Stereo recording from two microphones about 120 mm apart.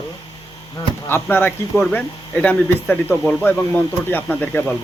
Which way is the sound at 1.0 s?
20° left (ahead or behind).